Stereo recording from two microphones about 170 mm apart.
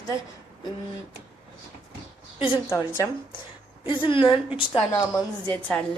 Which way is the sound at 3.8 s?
30° left (ahead or behind).